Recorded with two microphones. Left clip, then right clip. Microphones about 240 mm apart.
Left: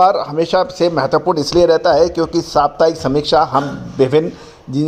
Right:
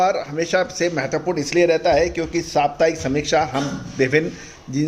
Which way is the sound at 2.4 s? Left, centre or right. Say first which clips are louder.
Left 4 dB; centre.